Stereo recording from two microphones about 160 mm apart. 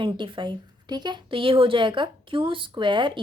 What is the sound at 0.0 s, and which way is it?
Speech, 30° right (ahead or behind).